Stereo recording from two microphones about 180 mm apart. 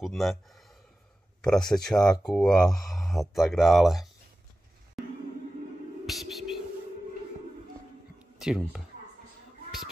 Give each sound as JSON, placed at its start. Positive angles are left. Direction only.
{"t": 0.0, "sound": "speech", "side_deg": 0}
{"t": 2.0, "sound": "speech", "side_deg": 20}
{"t": 2.2, "sound": "speech", "side_deg": 5}
{"t": 6.0, "sound": "music", "side_deg": 0}
{"t": 8.4, "sound": "speech", "side_deg": -5}